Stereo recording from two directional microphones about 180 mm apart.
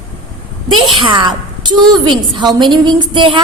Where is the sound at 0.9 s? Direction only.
25° right (ahead or behind).